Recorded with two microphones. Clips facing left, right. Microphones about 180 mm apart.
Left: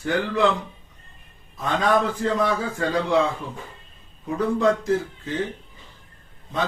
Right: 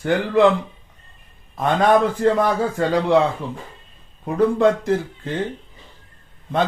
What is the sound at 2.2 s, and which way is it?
Speech, 65° right (ahead or behind).